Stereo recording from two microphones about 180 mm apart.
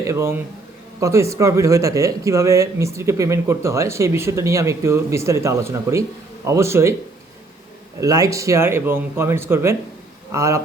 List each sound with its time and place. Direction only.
0.1 s speech: 15° right (ahead or behind)
8.0 s speech: 20° right (ahead or behind)